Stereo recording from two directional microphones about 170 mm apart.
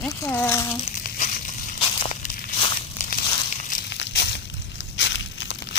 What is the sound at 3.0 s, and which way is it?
Crumpling, 60° left (ahead or behind).